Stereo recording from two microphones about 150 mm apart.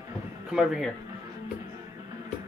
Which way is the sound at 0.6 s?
Centre (ahead or behind).